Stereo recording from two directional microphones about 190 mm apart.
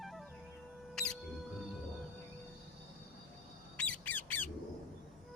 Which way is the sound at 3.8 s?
10° left (ahead or behind).